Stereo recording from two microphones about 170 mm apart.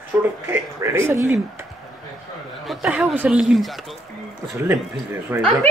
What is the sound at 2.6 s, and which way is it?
Speech, 5° right (ahead or behind).